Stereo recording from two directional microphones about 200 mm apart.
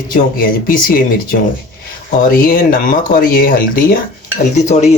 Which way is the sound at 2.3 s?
45° left (ahead or behind).